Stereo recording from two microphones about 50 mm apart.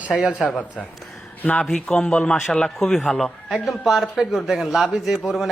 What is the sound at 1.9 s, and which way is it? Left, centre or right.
Speech, centre.